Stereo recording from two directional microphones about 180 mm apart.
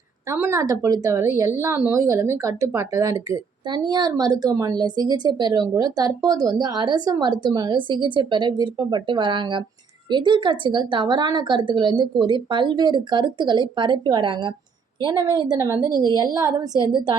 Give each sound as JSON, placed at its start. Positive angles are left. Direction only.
{"t": 0.3, "sound": "a woman's voice", "side_deg": -15}